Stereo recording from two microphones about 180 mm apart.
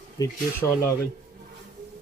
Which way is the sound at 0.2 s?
20° left (ahead or behind).